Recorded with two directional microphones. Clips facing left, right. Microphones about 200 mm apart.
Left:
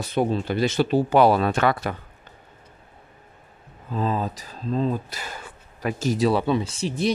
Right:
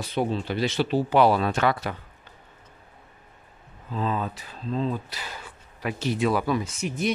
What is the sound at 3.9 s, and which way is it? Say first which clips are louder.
Speech: left 3 dB; 40° left (ahead or behind).